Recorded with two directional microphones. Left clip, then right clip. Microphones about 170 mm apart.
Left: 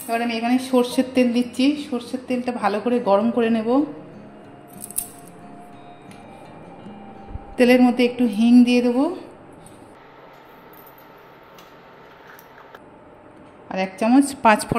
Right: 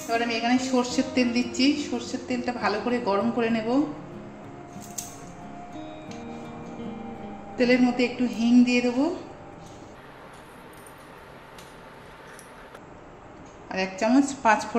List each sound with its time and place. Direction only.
0.1 s a woman's voice: 45° left (ahead or behind)
1.9 s a woman's voice: 35° left (ahead or behind)
2.2 s a woman's voice: 45° left (ahead or behind)
7.5 s speech: 60° left (ahead or behind)
13.7 s a woman's voice: 45° left (ahead or behind)